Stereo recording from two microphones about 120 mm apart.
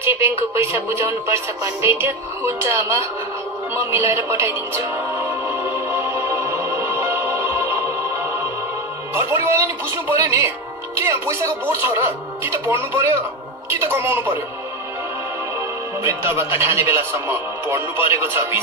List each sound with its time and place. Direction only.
0.0 s speech: 20° right (ahead or behind)
4.1 s music: 20° right (ahead or behind)
9.1 s speech: 20° right (ahead or behind)
16.0 s speech: 20° right (ahead or behind)